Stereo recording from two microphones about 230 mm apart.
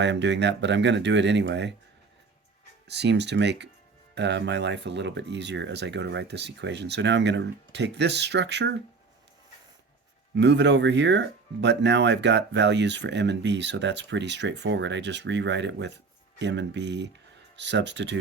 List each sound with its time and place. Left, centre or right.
0.0 s speech: right
2.8 s speech: right
10.3 s speech: right